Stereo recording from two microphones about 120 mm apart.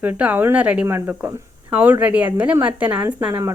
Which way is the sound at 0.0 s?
15° right (ahead or behind).